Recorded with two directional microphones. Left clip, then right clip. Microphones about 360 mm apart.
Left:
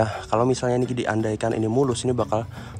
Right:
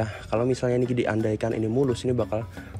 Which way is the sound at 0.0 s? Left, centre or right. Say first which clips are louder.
Left 5 dB; centre.